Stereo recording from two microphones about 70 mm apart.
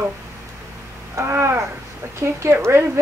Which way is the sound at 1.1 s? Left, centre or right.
Right.